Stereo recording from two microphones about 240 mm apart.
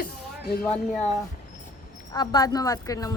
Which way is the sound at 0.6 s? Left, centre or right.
Centre.